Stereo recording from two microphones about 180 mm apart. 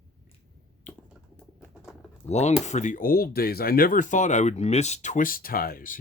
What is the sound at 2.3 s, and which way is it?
Speech, 40° left (ahead or behind).